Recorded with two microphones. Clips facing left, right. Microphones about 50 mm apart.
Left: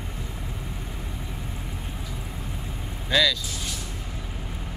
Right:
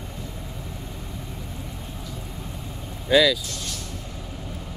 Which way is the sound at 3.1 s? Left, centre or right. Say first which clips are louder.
Right 4 dB; centre.